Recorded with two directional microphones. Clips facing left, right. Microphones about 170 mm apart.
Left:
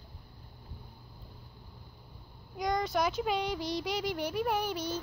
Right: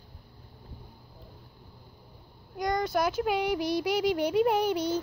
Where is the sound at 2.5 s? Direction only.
Centre (ahead or behind).